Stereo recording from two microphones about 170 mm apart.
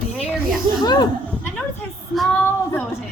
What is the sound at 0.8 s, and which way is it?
Speech, 25° left (ahead or behind).